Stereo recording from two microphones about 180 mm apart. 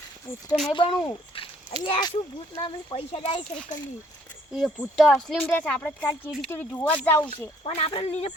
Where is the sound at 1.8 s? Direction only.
30° left (ahead or behind).